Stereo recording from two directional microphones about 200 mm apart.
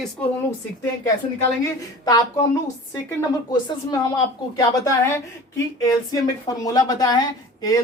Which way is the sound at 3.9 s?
20° left (ahead or behind).